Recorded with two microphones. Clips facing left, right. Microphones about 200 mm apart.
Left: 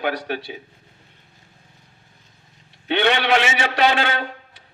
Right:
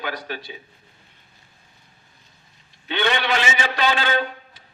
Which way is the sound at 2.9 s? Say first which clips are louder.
Left 4 dB; 70° left (ahead or behind).